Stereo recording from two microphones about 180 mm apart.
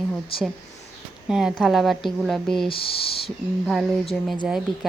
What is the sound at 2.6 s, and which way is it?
Speech, 30° left (ahead or behind).